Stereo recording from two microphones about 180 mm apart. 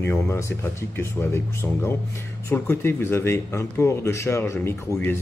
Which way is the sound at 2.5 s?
15° left (ahead or behind).